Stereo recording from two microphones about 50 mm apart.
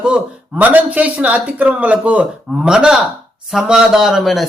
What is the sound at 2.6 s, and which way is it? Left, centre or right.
Speech, centre.